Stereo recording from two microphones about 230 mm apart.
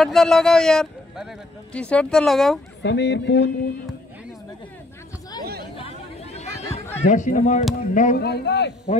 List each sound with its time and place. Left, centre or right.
0.0 s a man's voice: centre
2.8 s speech: left
5.8 s chatter: left
7.1 s speech: left
8.3 s speech: left